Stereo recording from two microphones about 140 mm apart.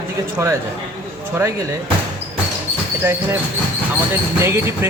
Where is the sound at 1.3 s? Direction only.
20° right (ahead or behind).